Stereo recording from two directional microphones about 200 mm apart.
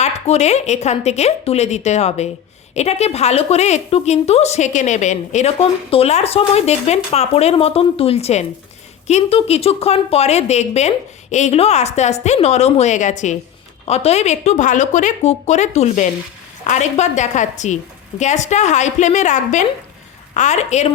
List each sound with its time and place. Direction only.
0.0 s a woman's voice: 35° left (ahead or behind)